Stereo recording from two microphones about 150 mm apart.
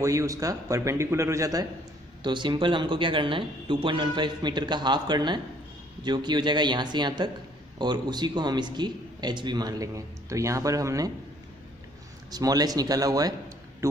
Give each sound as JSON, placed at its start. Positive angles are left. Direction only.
{"t": 0.0, "sound": "a man's voice", "side_deg": -20}
{"t": 12.3, "sound": "a man's voice", "side_deg": -25}